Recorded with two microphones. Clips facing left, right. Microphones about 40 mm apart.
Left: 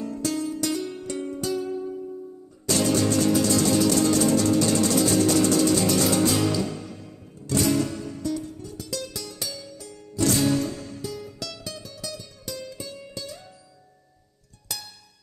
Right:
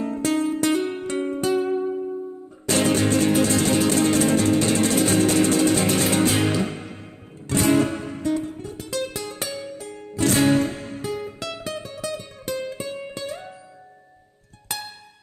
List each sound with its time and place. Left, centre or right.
0.0 s music: right
14.7 s music: right